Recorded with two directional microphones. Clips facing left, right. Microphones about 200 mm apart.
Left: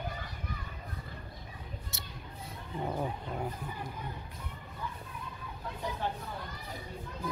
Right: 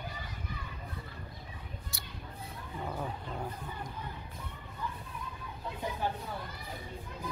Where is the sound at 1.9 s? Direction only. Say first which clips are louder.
Left 1 dB; 25° left (ahead or behind).